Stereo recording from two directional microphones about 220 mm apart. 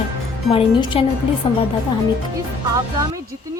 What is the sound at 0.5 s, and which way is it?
Speech, 25° left (ahead or behind).